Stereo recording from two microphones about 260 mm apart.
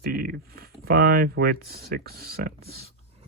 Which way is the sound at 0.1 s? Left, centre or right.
Right.